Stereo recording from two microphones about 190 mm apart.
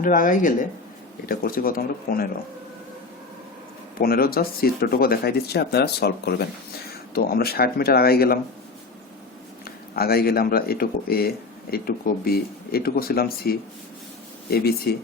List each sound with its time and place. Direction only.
0.0 s speech: 45° left (ahead or behind)
4.0 s speech: 50° left (ahead or behind)
9.9 s speech: 55° left (ahead or behind)